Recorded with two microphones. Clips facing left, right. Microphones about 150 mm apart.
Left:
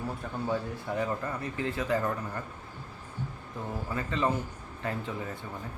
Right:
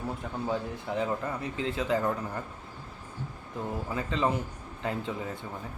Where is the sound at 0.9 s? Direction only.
20° right (ahead or behind).